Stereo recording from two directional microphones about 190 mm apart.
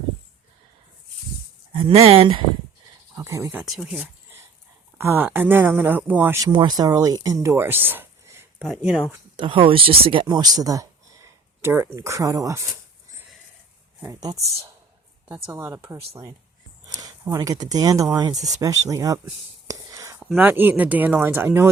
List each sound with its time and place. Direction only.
1.7 s speech: 30° right (ahead or behind)
3.2 s speech: 15° right (ahead or behind)
8.5 s speech: centre (ahead or behind)
9.3 s speech: 25° right (ahead or behind)
14.0 s speech: 20° right (ahead or behind)
19.6 s whispering: 15° right (ahead or behind)
20.3 s speech: 10° right (ahead or behind)